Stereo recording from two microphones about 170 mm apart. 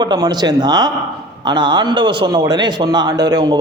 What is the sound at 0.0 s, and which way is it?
A man's voice, 25° right (ahead or behind).